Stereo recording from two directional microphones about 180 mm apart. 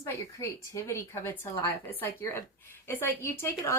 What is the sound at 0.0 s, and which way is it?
Speech, 15° left (ahead or behind).